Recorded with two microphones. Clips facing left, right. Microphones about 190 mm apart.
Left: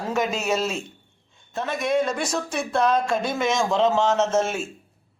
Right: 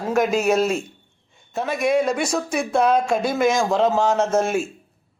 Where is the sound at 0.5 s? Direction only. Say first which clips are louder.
Right 4 dB; 55° right (ahead or behind).